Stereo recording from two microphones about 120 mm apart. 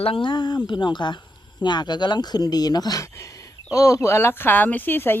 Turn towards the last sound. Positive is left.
turn(degrees=15)  # may be behind; listen again after turning